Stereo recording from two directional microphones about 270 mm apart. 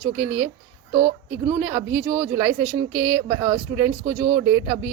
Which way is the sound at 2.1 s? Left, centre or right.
Centre.